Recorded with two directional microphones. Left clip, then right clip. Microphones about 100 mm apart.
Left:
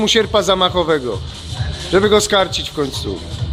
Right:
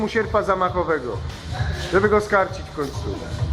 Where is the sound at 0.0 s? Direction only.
20° left (ahead or behind).